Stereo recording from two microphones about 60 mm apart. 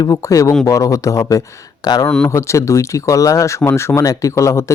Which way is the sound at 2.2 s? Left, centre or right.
Left.